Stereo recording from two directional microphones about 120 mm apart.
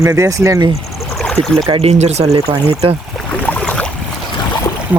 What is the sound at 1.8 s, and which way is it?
Speech, 60° right (ahead or behind).